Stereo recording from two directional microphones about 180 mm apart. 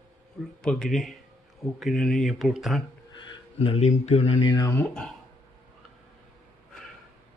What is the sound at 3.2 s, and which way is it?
Speech, 30° left (ahead or behind).